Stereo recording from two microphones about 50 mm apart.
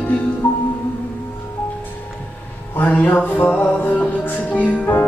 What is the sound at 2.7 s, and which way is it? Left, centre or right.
Music, left.